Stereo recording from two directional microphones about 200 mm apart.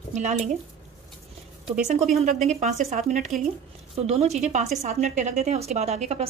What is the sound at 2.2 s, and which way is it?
A woman's voice, 35° right (ahead or behind).